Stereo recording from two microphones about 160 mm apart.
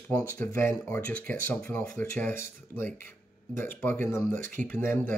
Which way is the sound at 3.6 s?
15° left (ahead or behind).